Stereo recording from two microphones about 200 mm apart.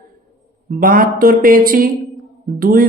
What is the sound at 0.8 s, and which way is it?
Speech, 45° right (ahead or behind).